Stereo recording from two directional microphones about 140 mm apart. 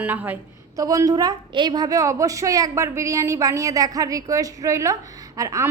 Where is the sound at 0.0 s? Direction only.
10° right (ahead or behind).